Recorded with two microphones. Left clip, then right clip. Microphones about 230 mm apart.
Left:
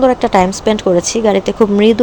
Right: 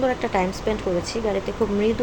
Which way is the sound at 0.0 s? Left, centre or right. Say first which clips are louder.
Left 11 dB; left.